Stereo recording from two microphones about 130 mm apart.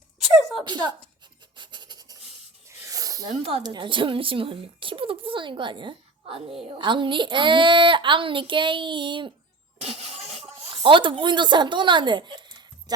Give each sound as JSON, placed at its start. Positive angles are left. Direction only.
{"t": 0.3, "sound": "a sound", "side_deg": 0}
{"t": 0.6, "sound": "a child's voice", "side_deg": -35}
{"t": 1.5, "sound": "filing", "side_deg": -35}
{"t": 2.6, "sound": "snake", "side_deg": -25}
{"t": 3.6, "sound": "a child's voice", "side_deg": -35}
{"t": 9.7, "sound": "vehicle", "side_deg": -55}
{"t": 10.8, "sound": "a child's voice", "side_deg": -40}